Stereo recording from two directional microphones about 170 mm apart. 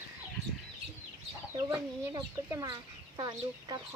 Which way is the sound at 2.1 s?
25° right (ahead or behind).